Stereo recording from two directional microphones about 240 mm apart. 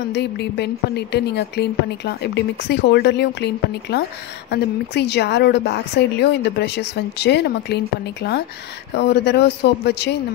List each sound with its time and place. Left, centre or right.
0.1 s a woman's voice: left